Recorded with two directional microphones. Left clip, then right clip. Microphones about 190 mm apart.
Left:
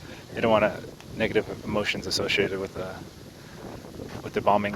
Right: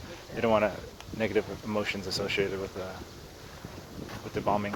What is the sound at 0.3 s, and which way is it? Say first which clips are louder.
Speech: left 4 dB; 30° left (ahead or behind).